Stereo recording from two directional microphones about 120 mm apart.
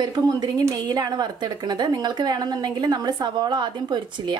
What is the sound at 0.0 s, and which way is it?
A woman's voice, 35° right (ahead or behind).